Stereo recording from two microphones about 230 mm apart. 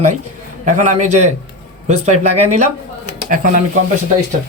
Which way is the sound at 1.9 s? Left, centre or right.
Right.